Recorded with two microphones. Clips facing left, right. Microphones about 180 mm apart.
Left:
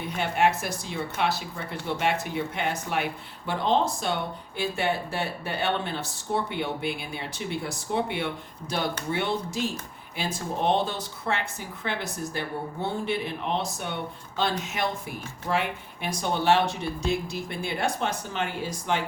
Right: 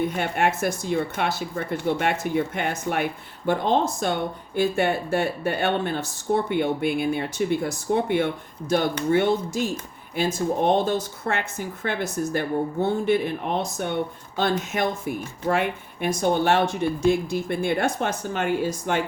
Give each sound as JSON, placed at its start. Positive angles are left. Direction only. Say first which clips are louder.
{"t": 0.2, "sound": "speech", "louder": "right 1 dB", "side_deg": -50}